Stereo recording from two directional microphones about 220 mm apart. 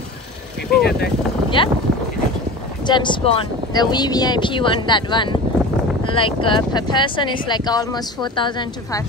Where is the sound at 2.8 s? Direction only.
20° left (ahead or behind).